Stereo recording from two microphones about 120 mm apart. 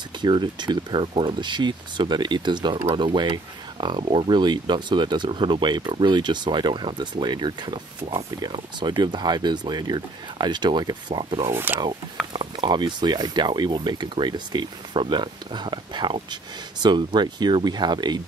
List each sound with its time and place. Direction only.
0.2 s speech: 40° right (ahead or behind)
11.4 s speech: 20° right (ahead or behind)
12.3 s speech: 40° right (ahead or behind)